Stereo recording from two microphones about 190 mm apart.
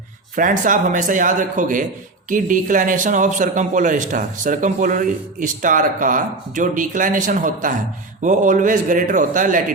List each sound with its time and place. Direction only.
0.3 s a man's voice: 45° right (ahead or behind)